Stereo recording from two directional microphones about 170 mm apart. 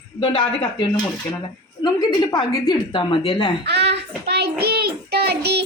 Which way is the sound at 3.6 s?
80° right.